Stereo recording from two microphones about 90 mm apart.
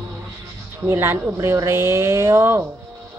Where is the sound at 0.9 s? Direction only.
30° right (ahead or behind).